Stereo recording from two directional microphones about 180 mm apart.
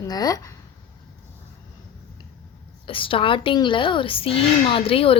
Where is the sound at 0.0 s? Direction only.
20° left (ahead or behind).